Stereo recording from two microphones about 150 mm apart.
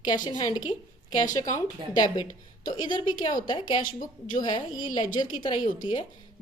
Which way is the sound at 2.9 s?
30° left (ahead or behind).